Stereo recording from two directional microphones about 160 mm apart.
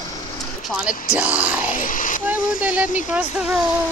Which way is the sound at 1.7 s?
55° left (ahead or behind).